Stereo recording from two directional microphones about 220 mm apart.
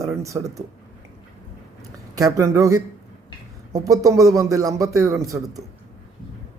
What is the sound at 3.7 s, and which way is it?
A man's voice, 15° right (ahead or behind).